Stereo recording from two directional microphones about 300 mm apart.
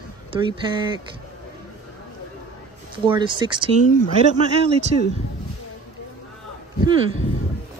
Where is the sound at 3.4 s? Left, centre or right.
Centre.